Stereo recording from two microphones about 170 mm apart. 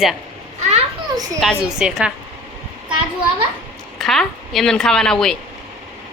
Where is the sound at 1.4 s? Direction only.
Centre (ahead or behind).